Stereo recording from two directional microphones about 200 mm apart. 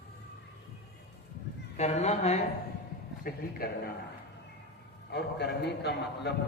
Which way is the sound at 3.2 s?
50° left (ahead or behind).